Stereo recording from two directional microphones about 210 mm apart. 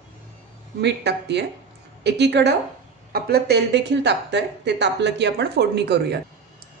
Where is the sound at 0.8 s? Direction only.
55° right (ahead or behind).